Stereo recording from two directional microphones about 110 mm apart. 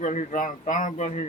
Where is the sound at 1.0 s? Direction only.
90° left.